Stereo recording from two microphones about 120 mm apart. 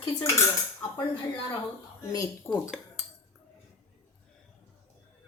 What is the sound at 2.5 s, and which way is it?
Dishes, 20° left (ahead or behind).